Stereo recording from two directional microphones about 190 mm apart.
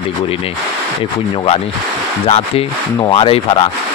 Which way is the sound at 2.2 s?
35° left (ahead or behind).